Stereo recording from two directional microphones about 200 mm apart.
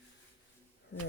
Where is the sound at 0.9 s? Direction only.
60° left (ahead or behind).